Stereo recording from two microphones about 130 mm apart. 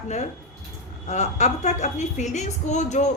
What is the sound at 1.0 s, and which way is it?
A woman's voice, 60° left (ahead or behind).